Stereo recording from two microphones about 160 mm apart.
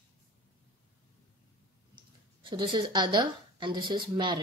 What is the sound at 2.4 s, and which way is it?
Speech, 30° right (ahead or behind).